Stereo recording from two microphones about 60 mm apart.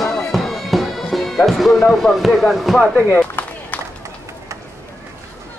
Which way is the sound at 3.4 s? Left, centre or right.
Left.